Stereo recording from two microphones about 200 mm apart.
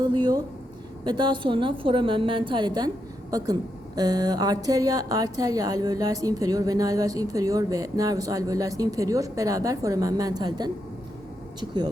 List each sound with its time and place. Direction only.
0.0 s a woman's voice: 20° right (ahead or behind)